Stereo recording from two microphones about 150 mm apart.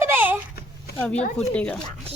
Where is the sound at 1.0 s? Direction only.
10° left (ahead or behind).